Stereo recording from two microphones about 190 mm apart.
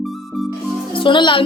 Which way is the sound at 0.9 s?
25° left (ahead or behind).